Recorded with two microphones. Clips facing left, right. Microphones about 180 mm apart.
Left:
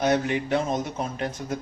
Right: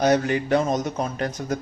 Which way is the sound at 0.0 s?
40° right (ahead or behind).